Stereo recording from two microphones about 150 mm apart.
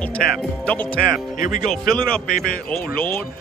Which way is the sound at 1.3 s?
60° left (ahead or behind).